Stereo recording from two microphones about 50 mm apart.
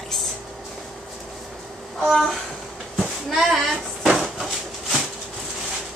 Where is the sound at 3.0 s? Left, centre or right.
Centre.